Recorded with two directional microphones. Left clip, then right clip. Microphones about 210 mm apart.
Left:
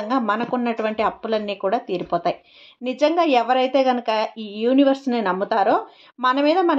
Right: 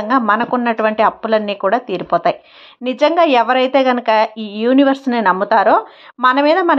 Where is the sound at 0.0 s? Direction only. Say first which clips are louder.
Right 7 dB; 10° right (ahead or behind).